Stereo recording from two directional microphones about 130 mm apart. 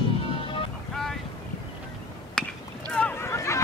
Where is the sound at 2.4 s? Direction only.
5° left (ahead or behind); by 3.6 s 25° left (ahead or behind).